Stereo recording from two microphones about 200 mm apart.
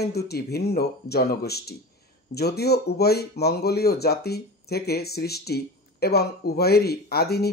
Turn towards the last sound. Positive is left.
turn(degrees=50)  # may be behind; listen again after turning